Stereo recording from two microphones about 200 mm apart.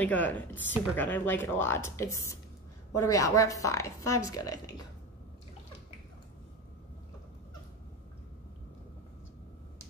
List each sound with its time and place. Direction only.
0.0 s speech: 10° left (ahead or behind)